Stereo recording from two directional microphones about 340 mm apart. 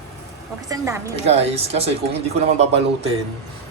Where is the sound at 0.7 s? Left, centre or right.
Centre.